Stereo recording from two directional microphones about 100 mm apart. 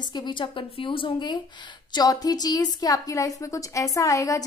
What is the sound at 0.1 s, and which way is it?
A woman's voice, 50° left (ahead or behind).